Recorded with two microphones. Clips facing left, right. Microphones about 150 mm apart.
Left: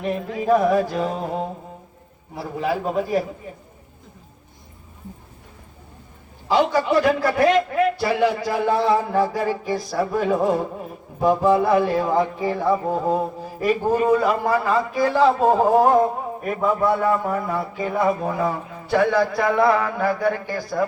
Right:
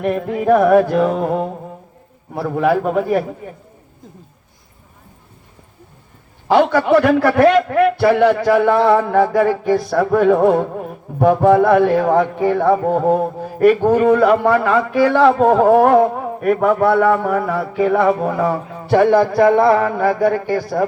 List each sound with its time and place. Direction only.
0.0 s a man's voice: 55° right (ahead or behind)
6.5 s a man's voice: 60° right (ahead or behind)